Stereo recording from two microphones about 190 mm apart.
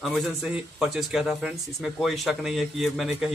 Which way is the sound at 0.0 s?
Centre (ahead or behind).